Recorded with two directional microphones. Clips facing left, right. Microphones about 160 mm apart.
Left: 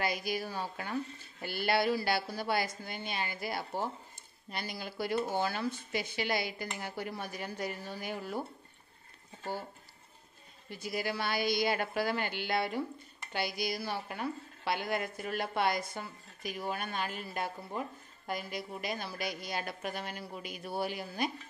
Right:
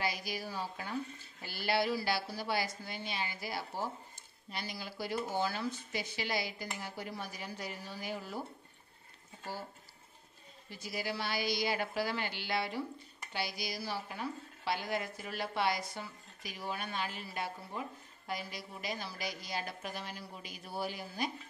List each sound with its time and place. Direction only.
0.0 s a woman's voice: 55° left (ahead or behind)
10.7 s a woman's voice: 55° left (ahead or behind)